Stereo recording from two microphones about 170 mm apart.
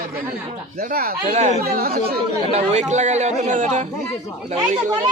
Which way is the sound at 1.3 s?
40° right (ahead or behind).